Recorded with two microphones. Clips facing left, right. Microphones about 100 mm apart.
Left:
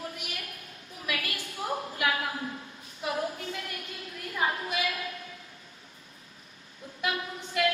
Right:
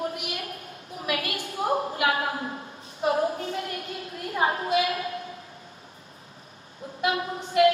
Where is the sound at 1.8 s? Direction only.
40° right (ahead or behind).